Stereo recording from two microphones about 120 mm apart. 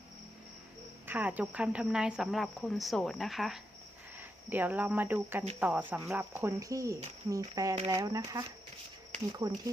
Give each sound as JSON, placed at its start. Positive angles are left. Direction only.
{"t": 1.0, "sound": "speech", "side_deg": -15}
{"t": 4.2, "sound": "speech", "side_deg": -15}